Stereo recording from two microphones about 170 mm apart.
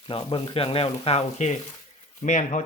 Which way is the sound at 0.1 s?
30° left (ahead or behind).